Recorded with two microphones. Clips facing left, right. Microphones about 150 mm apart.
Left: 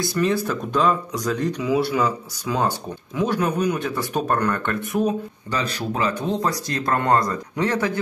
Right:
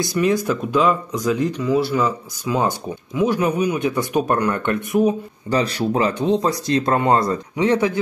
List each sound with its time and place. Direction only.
0.0 s speech: 15° right (ahead or behind)
1.6 s speech: centre (ahead or behind)
5.5 s speech: 30° right (ahead or behind)